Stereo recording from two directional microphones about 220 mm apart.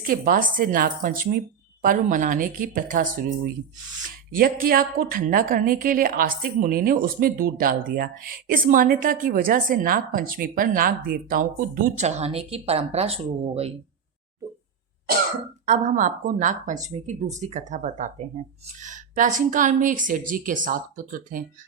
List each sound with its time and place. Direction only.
0.0 s a woman's voice: 40° right (ahead or behind)
15.6 s a woman's voice: 35° right (ahead or behind)